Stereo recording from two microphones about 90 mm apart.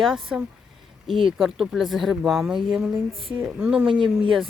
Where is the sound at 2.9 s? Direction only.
85° right.